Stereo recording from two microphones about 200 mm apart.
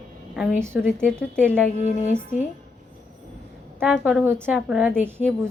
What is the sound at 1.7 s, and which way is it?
Music, 35° left (ahead or behind).